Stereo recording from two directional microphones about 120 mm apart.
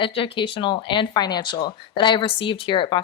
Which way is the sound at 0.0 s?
45° left (ahead or behind).